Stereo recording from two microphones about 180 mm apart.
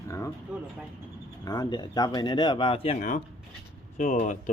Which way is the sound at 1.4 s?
20° left (ahead or behind).